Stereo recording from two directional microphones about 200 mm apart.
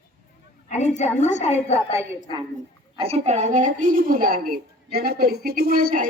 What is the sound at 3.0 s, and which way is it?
A woman's voice, 30° right (ahead or behind).